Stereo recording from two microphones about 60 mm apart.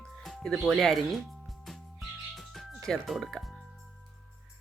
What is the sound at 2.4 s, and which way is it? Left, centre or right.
Music, centre.